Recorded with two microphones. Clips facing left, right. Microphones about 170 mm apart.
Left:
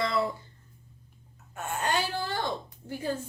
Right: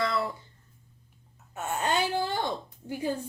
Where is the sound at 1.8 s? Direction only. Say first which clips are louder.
Right 2 dB; 20° right (ahead or behind).